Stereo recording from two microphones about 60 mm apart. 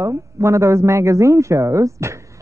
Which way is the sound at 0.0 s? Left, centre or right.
Right.